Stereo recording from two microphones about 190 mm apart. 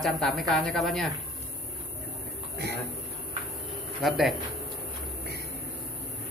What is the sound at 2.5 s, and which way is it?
Speech, 60° right (ahead or behind).